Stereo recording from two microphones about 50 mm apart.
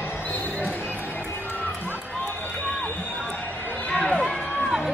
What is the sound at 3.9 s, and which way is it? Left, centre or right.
Run, centre.